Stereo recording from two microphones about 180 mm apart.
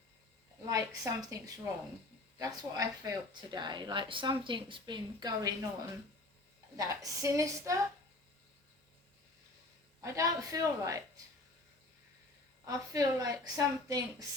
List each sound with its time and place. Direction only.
0.6 s speech: 20° right (ahead or behind)
6.7 s a woman's voice: 20° right (ahead or behind)
10.0 s a woman's voice: 15° right (ahead or behind)
12.6 s speech: 20° right (ahead or behind)